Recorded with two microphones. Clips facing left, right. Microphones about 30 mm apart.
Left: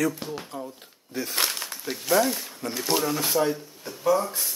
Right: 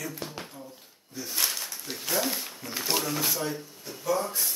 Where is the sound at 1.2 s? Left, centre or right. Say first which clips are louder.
Left 5 dB; left.